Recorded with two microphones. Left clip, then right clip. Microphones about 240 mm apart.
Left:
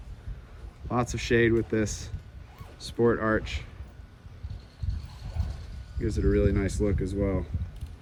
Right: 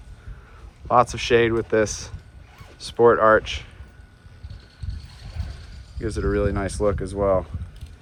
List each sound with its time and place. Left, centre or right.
0.9 s speech: centre
6.1 s speech: centre